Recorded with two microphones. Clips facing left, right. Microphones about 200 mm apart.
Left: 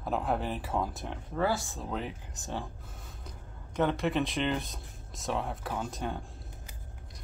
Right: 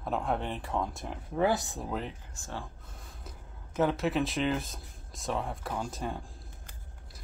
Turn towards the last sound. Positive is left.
turn(degrees=0)  # may be behind; listen again after turning